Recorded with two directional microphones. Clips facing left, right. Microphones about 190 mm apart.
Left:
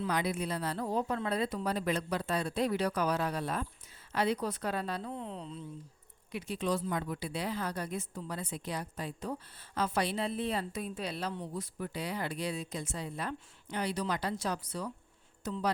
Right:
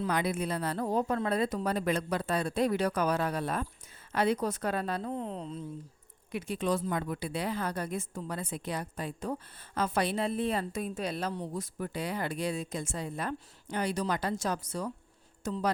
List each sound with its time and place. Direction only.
0.0 s a woman's voice: 50° right (ahead or behind)